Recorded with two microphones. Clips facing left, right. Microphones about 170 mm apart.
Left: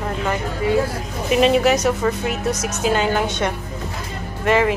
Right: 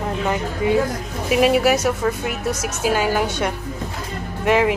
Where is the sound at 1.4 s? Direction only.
10° right (ahead or behind).